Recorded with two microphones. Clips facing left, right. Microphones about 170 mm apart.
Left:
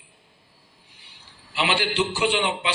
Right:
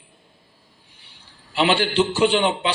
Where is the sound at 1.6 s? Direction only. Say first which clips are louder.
Right 5 dB; 30° right (ahead or behind).